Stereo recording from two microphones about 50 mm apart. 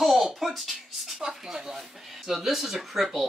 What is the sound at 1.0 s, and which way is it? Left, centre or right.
A woman's voice, centre.